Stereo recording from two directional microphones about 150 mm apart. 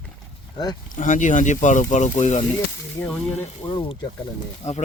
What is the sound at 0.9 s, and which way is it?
Speech, 55° left (ahead or behind).